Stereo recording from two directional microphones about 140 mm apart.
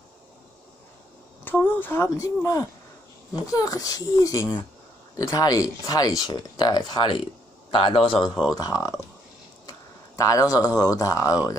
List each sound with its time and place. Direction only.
1.4 s a man's voice: 15° left (ahead or behind); by 8.3 s 35° left (ahead or behind)
8.5 s speech: 25° left (ahead or behind)